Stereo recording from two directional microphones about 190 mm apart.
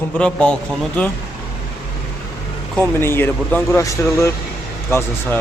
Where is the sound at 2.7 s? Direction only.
10° left (ahead or behind).